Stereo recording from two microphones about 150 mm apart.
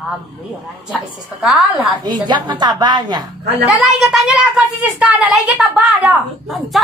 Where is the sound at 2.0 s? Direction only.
30° right (ahead or behind).